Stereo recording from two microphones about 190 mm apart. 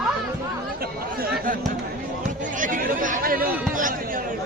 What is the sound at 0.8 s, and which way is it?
Speech, 55° right (ahead or behind).